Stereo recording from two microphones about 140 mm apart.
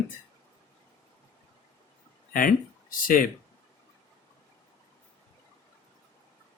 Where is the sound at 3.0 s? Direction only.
90° left.